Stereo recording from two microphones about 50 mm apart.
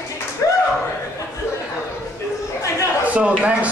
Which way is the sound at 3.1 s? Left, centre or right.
Right.